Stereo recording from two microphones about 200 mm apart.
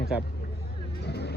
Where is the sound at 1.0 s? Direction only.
55° left (ahead or behind).